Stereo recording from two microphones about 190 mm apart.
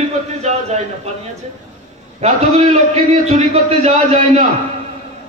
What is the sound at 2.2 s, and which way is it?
A man's voice, 35° right (ahead or behind).